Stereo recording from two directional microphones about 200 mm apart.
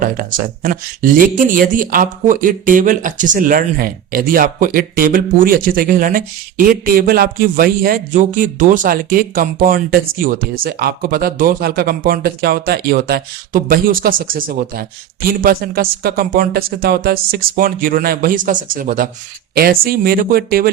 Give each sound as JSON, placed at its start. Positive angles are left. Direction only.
{"t": 0.0, "sound": "speech", "side_deg": -45}